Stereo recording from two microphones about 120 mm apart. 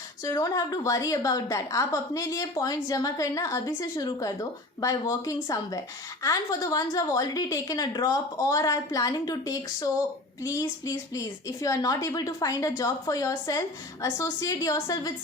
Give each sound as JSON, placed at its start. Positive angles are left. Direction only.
{"t": 0.3, "sound": "a woman's voice", "side_deg": 30}